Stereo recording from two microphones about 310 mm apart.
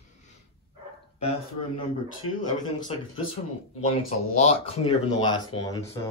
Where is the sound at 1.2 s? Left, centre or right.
Centre.